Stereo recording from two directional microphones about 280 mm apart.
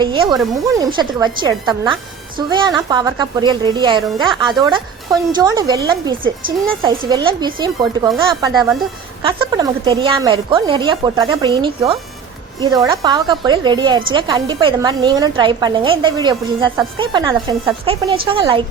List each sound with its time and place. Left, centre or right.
0.0 s a woman's voice: centre